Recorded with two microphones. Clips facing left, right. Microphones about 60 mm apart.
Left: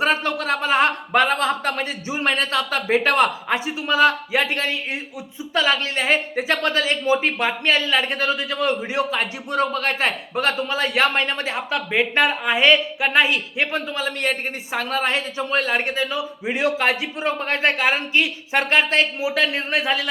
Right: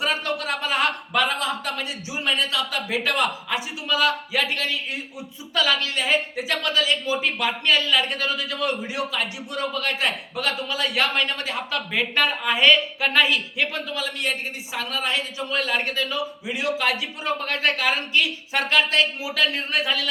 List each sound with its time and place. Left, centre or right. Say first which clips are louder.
0.0 s a man's voice: left 4 dB; left
14.2 s a woman's voice: left 4 dB; left
16.5 s speech: left 5 dB; left